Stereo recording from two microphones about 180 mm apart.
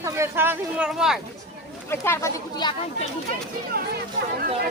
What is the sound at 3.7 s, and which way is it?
Speech, 60° right (ahead or behind).